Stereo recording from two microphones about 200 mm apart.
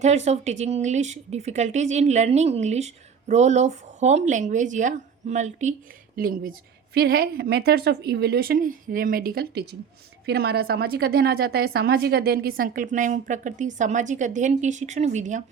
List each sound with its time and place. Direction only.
0.0 s a woman's voice: 35° right (ahead or behind)